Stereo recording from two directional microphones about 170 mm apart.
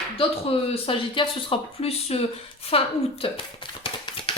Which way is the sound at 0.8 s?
30° left (ahead or behind).